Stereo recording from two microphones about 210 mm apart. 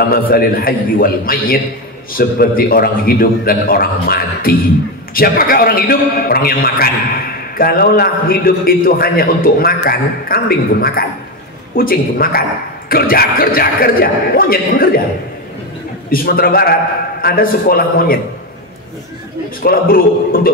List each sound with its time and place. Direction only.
0.1 s a man's voice: 45° left (ahead or behind)
16.1 s a man's voice: 45° left (ahead or behind)
19.6 s a man's voice: 45° left (ahead or behind)